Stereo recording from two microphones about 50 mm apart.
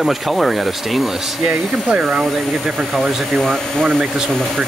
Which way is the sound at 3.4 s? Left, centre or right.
Centre.